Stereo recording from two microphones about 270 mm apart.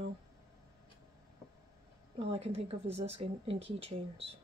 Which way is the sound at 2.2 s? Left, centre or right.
Right.